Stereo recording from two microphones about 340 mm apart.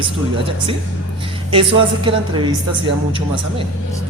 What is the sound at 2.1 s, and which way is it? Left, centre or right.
Speech, centre.